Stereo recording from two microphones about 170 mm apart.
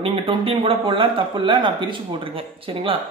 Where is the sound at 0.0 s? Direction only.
30° right (ahead or behind).